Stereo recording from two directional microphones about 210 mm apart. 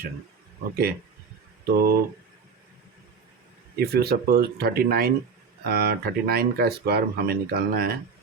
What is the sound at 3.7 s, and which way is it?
Speech, 50° right (ahead or behind).